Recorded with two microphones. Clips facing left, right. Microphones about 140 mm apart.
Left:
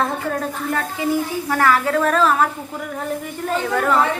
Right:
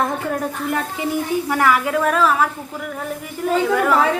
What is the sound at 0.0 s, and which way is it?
A woman's voice, 15° right (ahead or behind).